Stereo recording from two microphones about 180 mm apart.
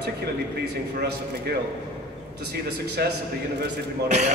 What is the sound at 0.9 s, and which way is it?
A man's voice, 60° right (ahead or behind).